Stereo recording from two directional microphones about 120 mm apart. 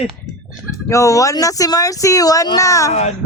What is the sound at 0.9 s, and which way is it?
Speech, 25° left (ahead or behind).